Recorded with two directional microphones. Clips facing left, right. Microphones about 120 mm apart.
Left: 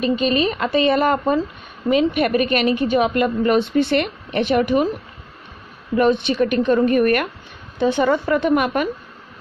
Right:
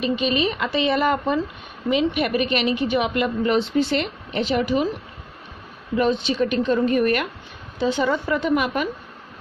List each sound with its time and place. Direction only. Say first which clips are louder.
0.0 s a woman's voice: left 3 dB; 45° left (ahead or behind)
5.9 s a woman's voice: left 4 dB; 55° left (ahead or behind)